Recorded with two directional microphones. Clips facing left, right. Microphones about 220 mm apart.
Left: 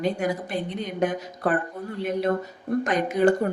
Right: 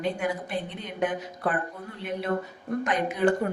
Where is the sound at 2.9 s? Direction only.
40° left (ahead or behind).